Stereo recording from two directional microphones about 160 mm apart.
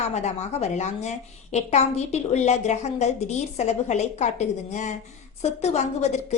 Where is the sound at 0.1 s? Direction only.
45° left (ahead or behind).